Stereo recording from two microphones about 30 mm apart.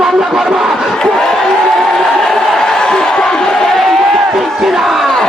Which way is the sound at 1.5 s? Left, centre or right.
Centre.